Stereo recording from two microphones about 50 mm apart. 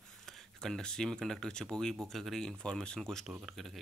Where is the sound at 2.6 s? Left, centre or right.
Centre.